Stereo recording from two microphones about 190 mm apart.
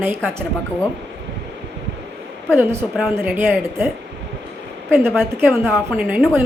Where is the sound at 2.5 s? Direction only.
15° right (ahead or behind).